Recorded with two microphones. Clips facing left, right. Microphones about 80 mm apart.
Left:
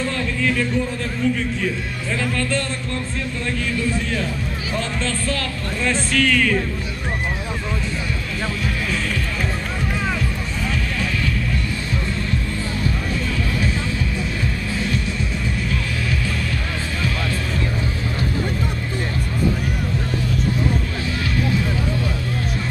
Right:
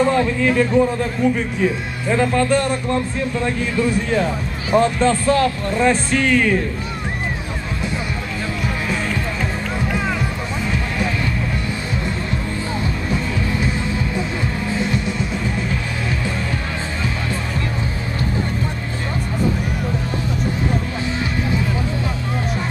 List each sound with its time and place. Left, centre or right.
0.0 s a man's voice: centre